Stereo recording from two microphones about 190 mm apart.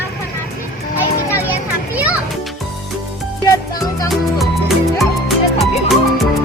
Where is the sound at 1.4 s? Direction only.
10° right (ahead or behind).